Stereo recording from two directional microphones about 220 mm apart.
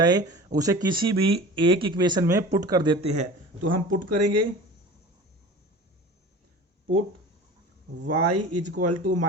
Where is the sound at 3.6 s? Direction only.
90° right.